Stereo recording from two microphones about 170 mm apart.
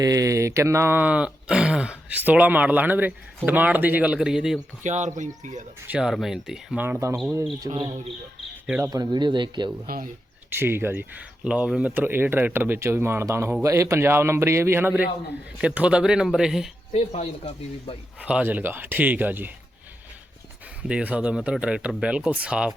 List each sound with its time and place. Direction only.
0.0 s speech: 20° right (ahead or behind); by 4.6 s 5° right (ahead or behind)
4.8 s speech: 45° right (ahead or behind)
5.9 s speech: 5° right (ahead or behind)
6.8 s speech: 15° right (ahead or behind)
9.8 s speech: 60° right (ahead or behind)
10.5 s speech: 15° right (ahead or behind)
17.2 s speech: 40° left (ahead or behind)
18.2 s speech: 5° right (ahead or behind)
20.8 s speech: 5° right (ahead or behind)